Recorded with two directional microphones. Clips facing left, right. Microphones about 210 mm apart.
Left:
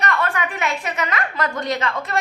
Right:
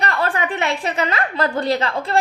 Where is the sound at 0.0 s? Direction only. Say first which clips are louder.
Right 1 dB; 30° right (ahead or behind).